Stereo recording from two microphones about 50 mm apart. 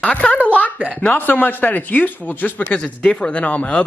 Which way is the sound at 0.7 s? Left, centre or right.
Right.